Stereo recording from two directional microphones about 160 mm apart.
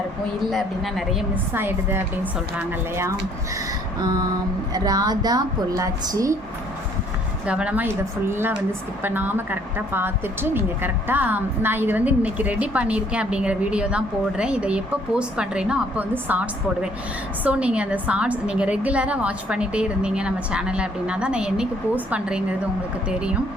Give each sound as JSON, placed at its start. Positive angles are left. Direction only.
{"t": 1.5, "sound": "a woman's voice", "side_deg": -15}
{"t": 7.4, "sound": "a woman's voice", "side_deg": -5}